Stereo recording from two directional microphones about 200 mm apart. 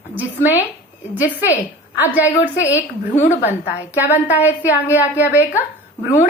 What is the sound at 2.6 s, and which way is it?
Speech, 15° left (ahead or behind).